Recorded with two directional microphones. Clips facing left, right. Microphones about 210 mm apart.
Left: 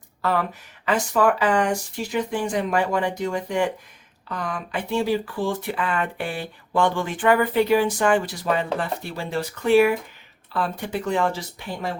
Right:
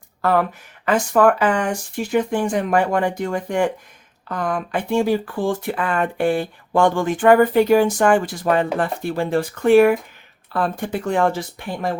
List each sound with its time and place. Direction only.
0.2 s speech: 55° right (ahead or behind)